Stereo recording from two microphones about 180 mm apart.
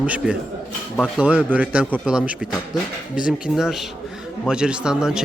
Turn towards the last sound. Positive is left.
turn(degrees=-5)  # may be behind; listen again after turning